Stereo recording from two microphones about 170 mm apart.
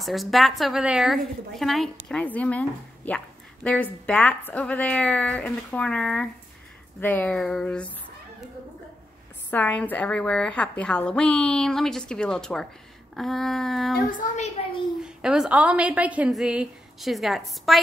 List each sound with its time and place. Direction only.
0.0 s a woman's voice: centre (ahead or behind)
3.6 s a woman's voice: 10° left (ahead or behind)
9.5 s a woman's voice: 10° left (ahead or behind)
14.1 s a woman's voice: 45° left (ahead or behind)
15.0 s a woman's voice: 5° right (ahead or behind)